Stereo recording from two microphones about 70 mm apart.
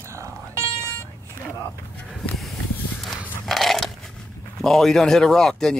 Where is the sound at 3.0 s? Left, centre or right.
Centre.